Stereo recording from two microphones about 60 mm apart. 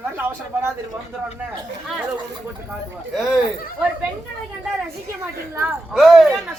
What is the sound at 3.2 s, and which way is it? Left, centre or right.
Speech, centre.